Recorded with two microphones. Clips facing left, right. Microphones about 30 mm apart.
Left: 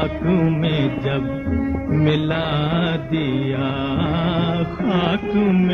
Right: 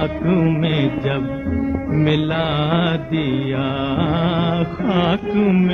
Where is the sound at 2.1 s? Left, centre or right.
Right.